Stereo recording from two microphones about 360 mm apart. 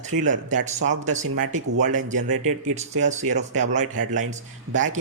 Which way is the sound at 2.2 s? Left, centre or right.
Right.